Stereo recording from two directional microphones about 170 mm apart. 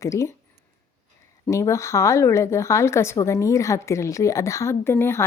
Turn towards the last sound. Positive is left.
turn(degrees=15)  # may be behind; listen again after turning